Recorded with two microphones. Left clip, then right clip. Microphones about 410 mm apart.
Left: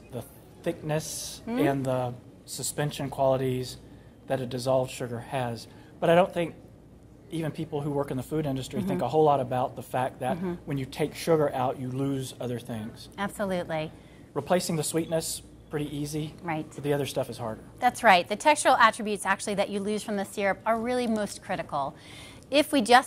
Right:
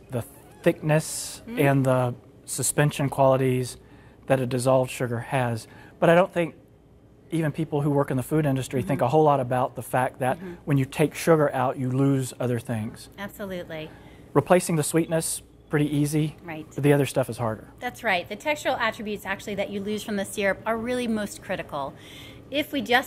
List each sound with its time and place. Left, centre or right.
0.1 s speech: right
13.1 s a woman's voice: left
14.3 s speech: right
17.7 s a woman's voice: left
22.5 s a woman's voice: left